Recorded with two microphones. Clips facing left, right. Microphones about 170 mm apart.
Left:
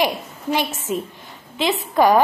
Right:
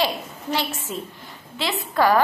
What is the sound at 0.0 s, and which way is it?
A woman's voice, 15° left (ahead or behind).